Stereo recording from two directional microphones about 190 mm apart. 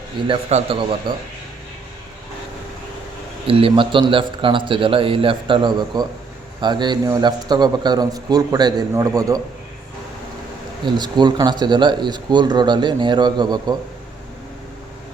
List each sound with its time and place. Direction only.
0.3 s speech: 30° right (ahead or behind)
3.4 s speech: 30° right (ahead or behind)
10.8 s speech: 25° right (ahead or behind)